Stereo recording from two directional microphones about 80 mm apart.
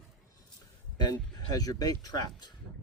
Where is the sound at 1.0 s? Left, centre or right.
Left.